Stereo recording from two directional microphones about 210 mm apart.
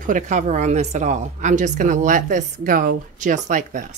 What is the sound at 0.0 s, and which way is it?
Speech, 40° right (ahead or behind).